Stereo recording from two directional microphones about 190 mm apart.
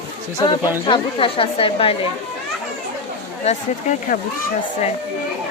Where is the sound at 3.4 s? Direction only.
40° left (ahead or behind).